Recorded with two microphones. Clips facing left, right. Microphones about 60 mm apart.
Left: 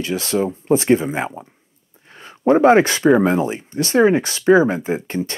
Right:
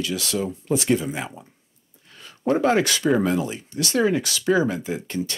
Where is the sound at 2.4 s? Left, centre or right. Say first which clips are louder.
Left 7 dB; left.